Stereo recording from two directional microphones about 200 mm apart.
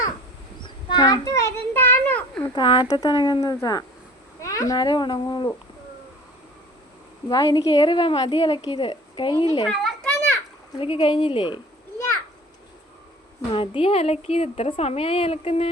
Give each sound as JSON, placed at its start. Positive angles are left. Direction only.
{"t": 0.6, "sound": "child singing", "side_deg": 20}
{"t": 2.6, "sound": "a woman's voice", "side_deg": 20}
{"t": 7.3, "sound": "a woman's voice", "side_deg": 20}
{"t": 9.6, "sound": "children playing", "side_deg": 0}
{"t": 10.8, "sound": "a woman's voice", "side_deg": 25}
{"t": 13.5, "sound": "a woman's voice", "side_deg": 25}